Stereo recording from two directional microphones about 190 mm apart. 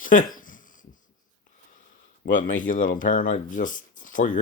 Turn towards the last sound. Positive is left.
turn(degrees=45)  # may be behind; listen again after turning